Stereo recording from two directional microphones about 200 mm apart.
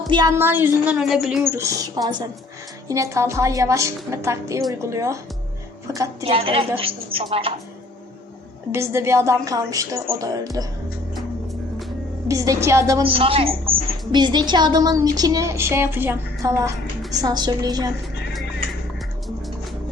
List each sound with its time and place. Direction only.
0.1 s a woman's voice: 20° right (ahead or behind)
6.2 s a woman's voice: 30° right (ahead or behind)
8.7 s a woman's voice: 10° right (ahead or behind)
12.3 s a woman's voice: 15° right (ahead or behind)
13.0 s a woman's voice: 25° right (ahead or behind)